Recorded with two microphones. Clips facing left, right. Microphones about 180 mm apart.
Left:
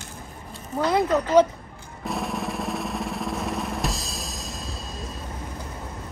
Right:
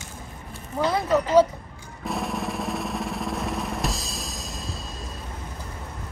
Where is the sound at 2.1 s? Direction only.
Centre (ahead or behind).